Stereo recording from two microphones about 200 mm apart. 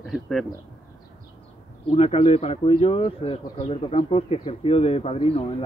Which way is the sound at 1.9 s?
30° left (ahead or behind).